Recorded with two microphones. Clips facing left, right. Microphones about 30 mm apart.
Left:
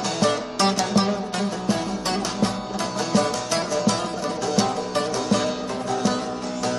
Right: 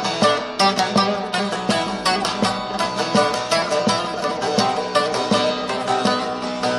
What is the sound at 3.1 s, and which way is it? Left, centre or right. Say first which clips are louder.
Music: right 4 dB; right.